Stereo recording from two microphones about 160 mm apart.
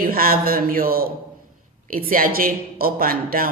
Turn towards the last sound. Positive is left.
turn(degrees=-65)  # may be behind; listen again after turning